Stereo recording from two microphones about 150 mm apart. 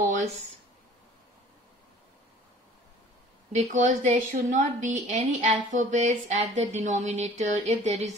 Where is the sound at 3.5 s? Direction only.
55° right (ahead or behind).